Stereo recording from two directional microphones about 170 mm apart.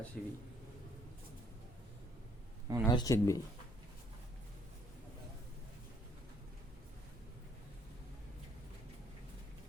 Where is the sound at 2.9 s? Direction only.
20° left (ahead or behind).